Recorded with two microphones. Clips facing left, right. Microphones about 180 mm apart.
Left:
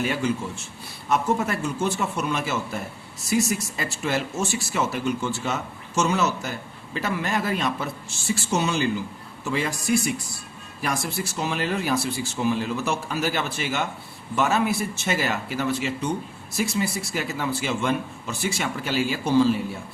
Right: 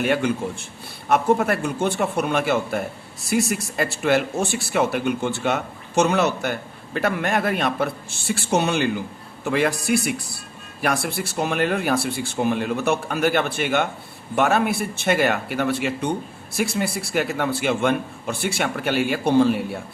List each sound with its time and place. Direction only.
0.0 s speech: 60° right (ahead or behind)